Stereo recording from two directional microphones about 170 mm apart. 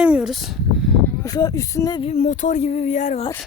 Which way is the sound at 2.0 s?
45° left (ahead or behind).